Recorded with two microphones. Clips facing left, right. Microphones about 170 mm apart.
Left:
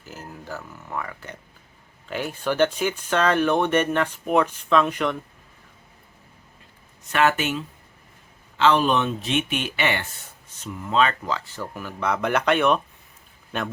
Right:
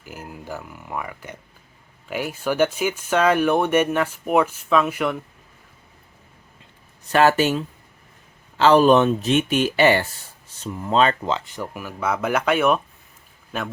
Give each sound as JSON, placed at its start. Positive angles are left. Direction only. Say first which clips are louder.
{"t": 0.0, "sound": "speech", "louder": "right 2 dB", "side_deg": -10}
{"t": 7.1, "sound": "speech", "louder": "right 5 dB", "side_deg": -35}
{"t": 11.3, "sound": "speech", "louder": "right 2 dB", "side_deg": -15}